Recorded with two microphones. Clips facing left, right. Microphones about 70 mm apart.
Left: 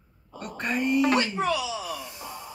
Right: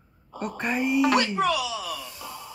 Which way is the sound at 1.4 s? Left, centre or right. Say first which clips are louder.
Right 2 dB; left.